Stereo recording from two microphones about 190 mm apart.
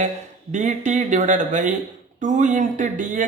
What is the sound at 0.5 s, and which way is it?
Speech, 40° right (ahead or behind).